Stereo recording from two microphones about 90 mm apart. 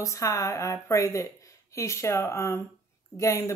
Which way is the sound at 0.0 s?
35° left (ahead or behind).